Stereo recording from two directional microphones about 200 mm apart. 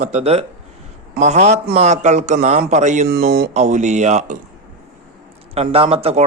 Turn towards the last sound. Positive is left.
turn(degrees=-30)  # may be behind; listen again after turning